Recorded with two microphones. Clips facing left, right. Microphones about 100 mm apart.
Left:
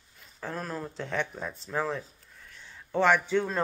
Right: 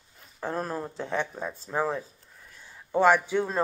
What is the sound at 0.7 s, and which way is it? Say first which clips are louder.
A man's voice: right 3 dB; 20° right (ahead or behind).